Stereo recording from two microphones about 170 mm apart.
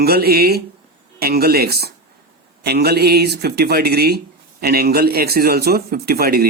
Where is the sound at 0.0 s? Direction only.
65° right (ahead or behind).